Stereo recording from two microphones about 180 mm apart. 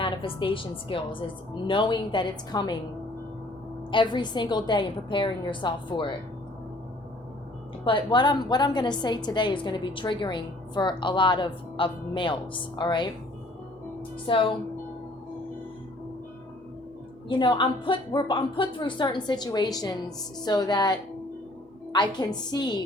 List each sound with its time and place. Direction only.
0.0 s a woman's voice: 30° left (ahead or behind)
3.9 s a woman's voice: 25° left (ahead or behind)
7.9 s a woman's voice: 25° left (ahead or behind)
14.3 s a woman's voice: 30° left (ahead or behind)
17.2 s a woman's voice: 25° left (ahead or behind)